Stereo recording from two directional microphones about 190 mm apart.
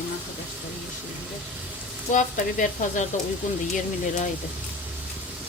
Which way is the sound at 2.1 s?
40° left (ahead or behind).